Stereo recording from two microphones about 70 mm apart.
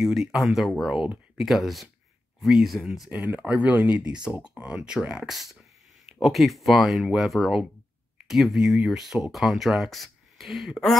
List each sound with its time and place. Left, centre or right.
0.0 s speech: centre
3.1 s speech: right; by 10.8 s centre